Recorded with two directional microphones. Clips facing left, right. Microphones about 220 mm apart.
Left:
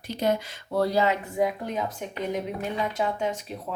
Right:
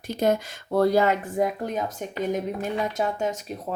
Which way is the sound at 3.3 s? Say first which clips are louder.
Right 1 dB; 40° right (ahead or behind).